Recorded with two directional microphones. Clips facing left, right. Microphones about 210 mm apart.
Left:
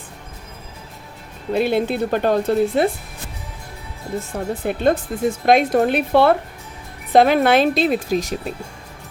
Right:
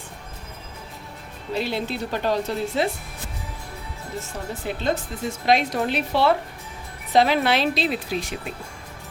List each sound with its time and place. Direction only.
1.5 s speech: 55° left (ahead or behind)
4.2 s speech: 55° left (ahead or behind)